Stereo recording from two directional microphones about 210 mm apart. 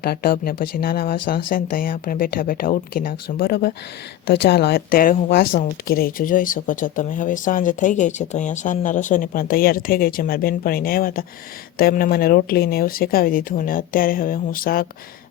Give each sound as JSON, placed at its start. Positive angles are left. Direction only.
{"t": 0.0, "sound": "speech", "side_deg": 45}